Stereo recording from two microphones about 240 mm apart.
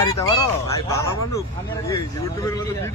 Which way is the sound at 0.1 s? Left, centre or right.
Centre.